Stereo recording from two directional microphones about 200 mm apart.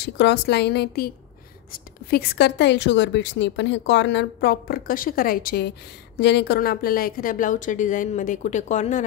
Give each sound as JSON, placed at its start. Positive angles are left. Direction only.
{"t": 0.0, "sound": "a woman's voice", "side_deg": 55}